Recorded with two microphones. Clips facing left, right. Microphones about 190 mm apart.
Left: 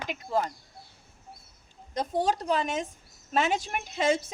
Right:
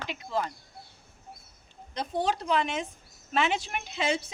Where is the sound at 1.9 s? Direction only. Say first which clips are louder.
Left 2 dB; 45° left (ahead or behind).